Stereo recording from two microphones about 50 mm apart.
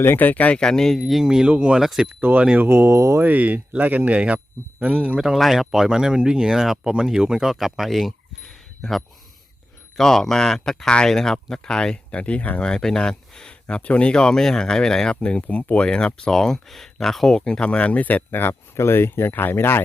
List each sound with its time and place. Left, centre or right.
0.0 s speech: left
0.6 s speech: centre
0.9 s speech: centre
1.2 s speech: centre
1.5 s speech: right
1.8 s speech: centre
2.3 s speech: right
3.2 s speech: right
5.4 s speech: centre
12.1 s speech: left
12.6 s speech: centre
15.1 s speech: left
18.7 s speech: left